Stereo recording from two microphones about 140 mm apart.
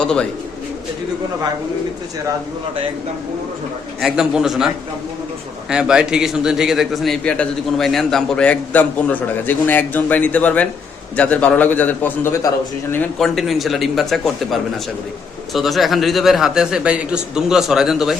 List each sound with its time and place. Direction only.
0.0 s speech: 5° left (ahead or behind)
4.0 s a man's voice: 5° right (ahead or behind); by 12.4 s 15° left (ahead or behind)
13.1 s a man's voice: centre (ahead or behind)